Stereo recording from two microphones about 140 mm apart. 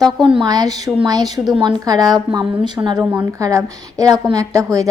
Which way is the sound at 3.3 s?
25° right (ahead or behind).